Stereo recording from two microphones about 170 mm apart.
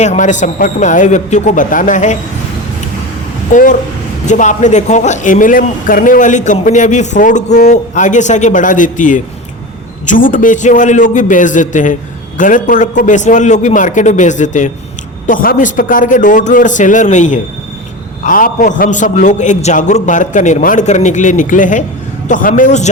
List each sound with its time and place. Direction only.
0.0 s a man's voice: 45° left (ahead or behind)
3.5 s a man's voice: 50° left (ahead or behind)